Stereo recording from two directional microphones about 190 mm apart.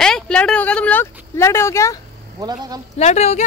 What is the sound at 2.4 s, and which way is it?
Speech, 20° right (ahead or behind).